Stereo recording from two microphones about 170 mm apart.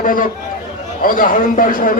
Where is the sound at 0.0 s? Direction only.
55° left (ahead or behind).